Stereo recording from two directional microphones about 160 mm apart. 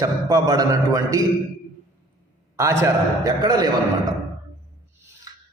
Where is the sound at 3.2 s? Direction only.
25° right (ahead or behind).